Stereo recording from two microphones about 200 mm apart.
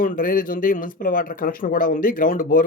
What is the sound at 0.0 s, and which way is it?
Speech, 45° left (ahead or behind).